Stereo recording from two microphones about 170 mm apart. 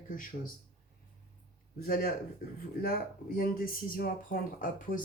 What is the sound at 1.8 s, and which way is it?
Speech, 60° left (ahead or behind).